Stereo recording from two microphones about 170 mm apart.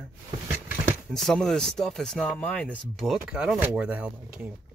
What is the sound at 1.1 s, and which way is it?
Speech, centre (ahead or behind).